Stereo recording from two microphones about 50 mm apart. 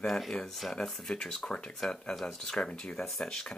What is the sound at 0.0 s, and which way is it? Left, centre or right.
Speech, centre.